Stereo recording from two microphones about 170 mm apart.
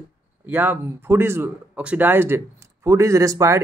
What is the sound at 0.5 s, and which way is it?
Speech, 10° right (ahead or behind).